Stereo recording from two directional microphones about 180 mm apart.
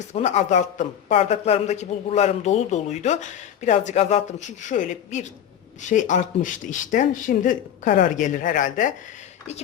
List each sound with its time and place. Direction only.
0.0 s speech: 40° left (ahead or behind)